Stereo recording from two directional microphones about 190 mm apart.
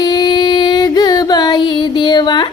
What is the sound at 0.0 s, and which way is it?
Music, 20° left (ahead or behind).